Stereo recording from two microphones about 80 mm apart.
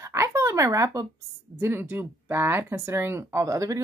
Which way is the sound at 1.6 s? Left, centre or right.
Right.